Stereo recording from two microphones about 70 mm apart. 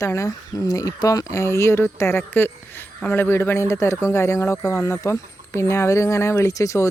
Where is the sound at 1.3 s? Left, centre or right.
Left.